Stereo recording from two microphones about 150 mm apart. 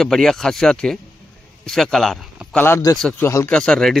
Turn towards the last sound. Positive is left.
turn(degrees=0)  # may be behind; listen again after turning